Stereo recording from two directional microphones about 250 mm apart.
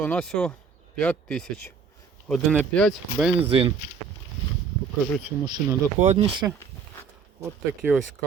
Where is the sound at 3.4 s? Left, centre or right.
Right.